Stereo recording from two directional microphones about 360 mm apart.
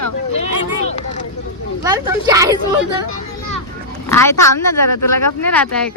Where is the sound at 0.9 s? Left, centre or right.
Centre.